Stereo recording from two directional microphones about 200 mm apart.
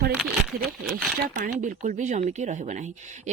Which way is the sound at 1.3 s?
40° right (ahead or behind).